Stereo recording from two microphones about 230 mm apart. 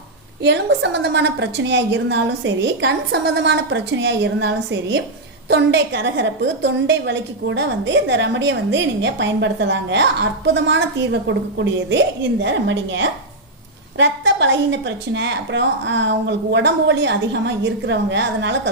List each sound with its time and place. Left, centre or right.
0.4 s a woman's voice: right